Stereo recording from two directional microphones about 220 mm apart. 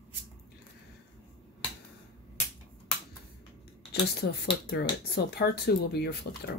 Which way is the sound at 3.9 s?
45° left (ahead or behind).